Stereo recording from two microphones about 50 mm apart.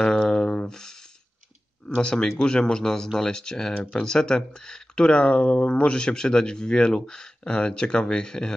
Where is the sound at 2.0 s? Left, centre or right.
Centre.